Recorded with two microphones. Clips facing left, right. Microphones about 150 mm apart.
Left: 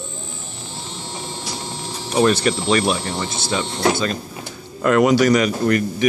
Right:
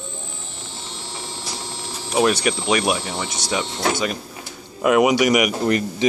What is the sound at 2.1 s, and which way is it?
Speech, 10° right (ahead or behind).